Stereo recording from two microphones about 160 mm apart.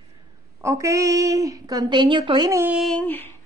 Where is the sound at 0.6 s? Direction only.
20° right (ahead or behind).